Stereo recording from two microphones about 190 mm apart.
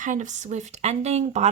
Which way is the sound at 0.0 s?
40° right (ahead or behind).